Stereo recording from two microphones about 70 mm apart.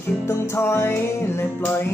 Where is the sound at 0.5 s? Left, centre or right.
Left.